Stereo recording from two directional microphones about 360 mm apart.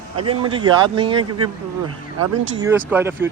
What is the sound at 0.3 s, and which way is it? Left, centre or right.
Speech, centre.